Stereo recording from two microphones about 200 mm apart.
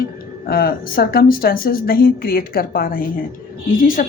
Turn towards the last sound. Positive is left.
turn(degrees=45)  # may be behind; listen again after turning